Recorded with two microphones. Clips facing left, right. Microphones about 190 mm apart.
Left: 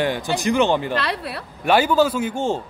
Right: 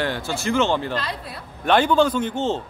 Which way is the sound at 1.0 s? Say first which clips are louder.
Left 5 dB; 70° left (ahead or behind).